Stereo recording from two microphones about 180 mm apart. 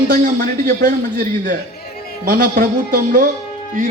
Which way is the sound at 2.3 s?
55° right (ahead or behind).